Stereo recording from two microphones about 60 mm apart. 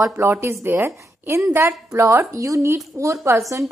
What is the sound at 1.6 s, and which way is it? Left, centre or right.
Speech, right.